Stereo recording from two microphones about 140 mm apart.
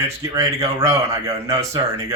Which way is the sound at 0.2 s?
20° right (ahead or behind).